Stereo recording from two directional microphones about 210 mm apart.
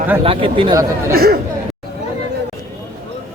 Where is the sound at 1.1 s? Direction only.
45° right (ahead or behind).